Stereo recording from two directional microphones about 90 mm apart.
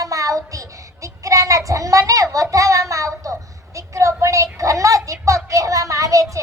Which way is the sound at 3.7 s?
35° right (ahead or behind).